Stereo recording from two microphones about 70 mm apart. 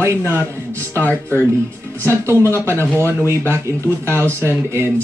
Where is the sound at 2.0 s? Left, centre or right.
Right.